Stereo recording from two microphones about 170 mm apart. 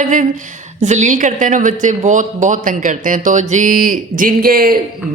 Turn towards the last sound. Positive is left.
turn(degrees=-60)  # may be behind; listen again after turning